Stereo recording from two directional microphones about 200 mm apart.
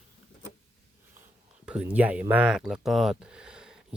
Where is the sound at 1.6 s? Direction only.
5° right (ahead or behind).